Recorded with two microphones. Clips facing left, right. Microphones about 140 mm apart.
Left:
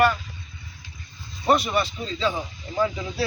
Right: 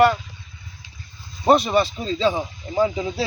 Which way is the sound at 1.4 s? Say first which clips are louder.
Right 5 dB; 30° right (ahead or behind).